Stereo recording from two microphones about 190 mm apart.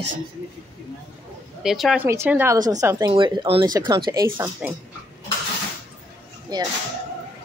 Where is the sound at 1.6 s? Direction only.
Centre (ahead or behind); by 4.3 s 20° right (ahead or behind).